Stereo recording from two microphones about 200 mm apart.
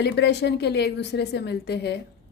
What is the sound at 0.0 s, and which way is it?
A woman's voice, 60° left (ahead or behind).